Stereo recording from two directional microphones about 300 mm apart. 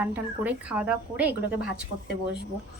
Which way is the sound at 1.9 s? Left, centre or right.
Left.